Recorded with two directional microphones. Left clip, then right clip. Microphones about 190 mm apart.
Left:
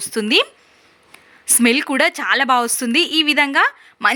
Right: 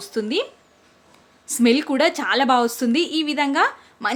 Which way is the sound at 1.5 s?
15° left (ahead or behind).